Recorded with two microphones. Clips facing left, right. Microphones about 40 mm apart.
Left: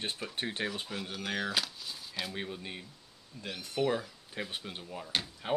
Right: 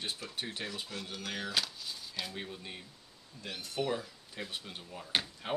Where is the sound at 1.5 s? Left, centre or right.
Centre.